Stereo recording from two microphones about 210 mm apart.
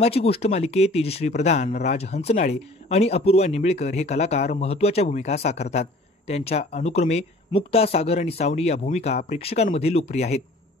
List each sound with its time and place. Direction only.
0.0 s speech: 30° left (ahead or behind)